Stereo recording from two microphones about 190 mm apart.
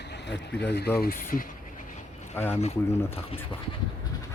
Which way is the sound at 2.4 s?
10° left (ahead or behind).